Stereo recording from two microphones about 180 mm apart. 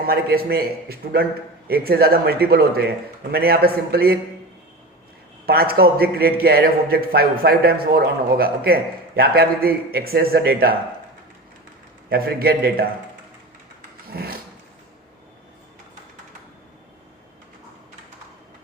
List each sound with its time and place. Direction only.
0.1 s a man's voice: 60° right (ahead or behind)
5.5 s a man's voice: 60° right (ahead or behind)
12.0 s a man's voice: 55° right (ahead or behind)
14.1 s a man's voice: 55° right (ahead or behind)